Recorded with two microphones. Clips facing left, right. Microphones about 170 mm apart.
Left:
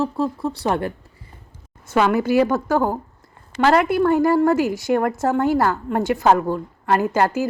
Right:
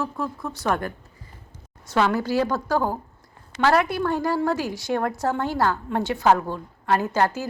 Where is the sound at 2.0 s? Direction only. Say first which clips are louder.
Left 5 dB; 15° left (ahead or behind).